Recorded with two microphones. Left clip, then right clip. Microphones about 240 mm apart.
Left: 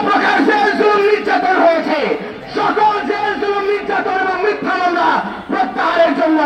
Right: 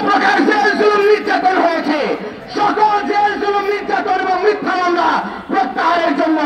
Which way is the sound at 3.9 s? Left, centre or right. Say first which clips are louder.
Right 3 dB; right.